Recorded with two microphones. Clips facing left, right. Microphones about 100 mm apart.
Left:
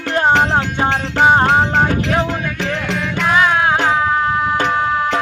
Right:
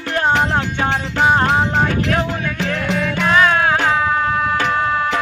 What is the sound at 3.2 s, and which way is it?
Music, 10° left (ahead or behind).